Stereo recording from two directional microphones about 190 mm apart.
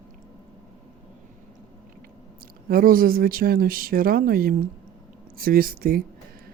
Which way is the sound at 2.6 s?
50° right (ahead or behind).